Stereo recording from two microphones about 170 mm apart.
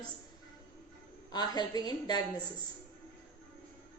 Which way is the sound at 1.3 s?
25° left (ahead or behind).